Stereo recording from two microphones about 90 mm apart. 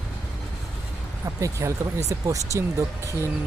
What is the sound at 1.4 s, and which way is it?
Speech, 35° right (ahead or behind).